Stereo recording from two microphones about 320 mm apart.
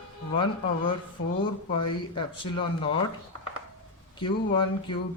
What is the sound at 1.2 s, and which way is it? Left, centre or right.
Speech, left.